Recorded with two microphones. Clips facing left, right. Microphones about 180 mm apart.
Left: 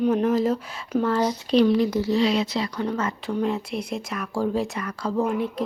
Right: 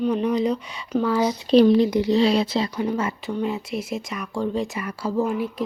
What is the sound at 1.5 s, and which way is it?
Speech, 30° right (ahead or behind).